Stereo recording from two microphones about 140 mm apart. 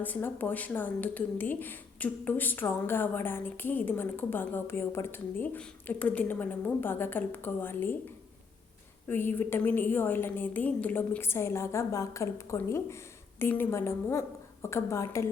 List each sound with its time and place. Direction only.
0.0 s a woman's voice: 15° left (ahead or behind)
9.0 s a woman's voice: 15° left (ahead or behind)